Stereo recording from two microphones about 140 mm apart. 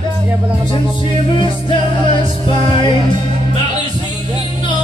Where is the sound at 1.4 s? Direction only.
35° left (ahead or behind).